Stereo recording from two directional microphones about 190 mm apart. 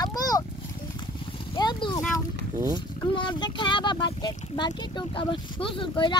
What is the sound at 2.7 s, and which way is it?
Speech, 25° left (ahead or behind).